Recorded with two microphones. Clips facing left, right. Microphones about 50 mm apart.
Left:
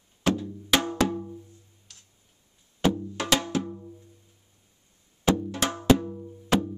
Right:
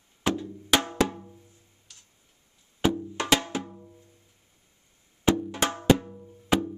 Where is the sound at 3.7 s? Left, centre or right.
Centre.